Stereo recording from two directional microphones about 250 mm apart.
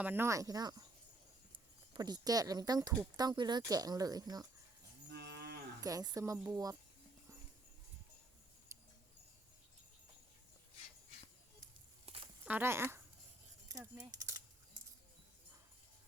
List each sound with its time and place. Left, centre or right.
0.0 s speech: centre
5.1 s moo: right
5.8 s speech: centre
8.7 s a sound: centre
12.0 s a sound: right
12.5 s speech: centre
13.7 s typing: centre